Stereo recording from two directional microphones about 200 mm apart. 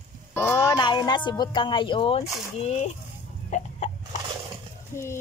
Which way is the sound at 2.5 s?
30° left (ahead or behind).